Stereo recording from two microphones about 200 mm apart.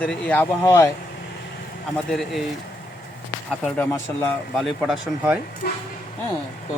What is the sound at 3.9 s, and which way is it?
Speech, 15° left (ahead or behind).